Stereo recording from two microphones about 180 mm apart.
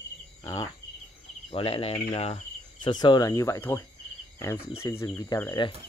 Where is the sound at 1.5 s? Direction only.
30° left (ahead or behind).